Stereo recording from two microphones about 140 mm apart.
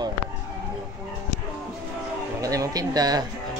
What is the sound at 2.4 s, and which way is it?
Speech, 25° right (ahead or behind).